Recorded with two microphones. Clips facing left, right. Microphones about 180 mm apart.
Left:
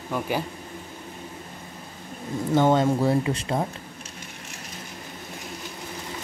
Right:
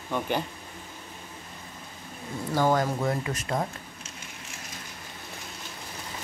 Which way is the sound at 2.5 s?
25° left (ahead or behind).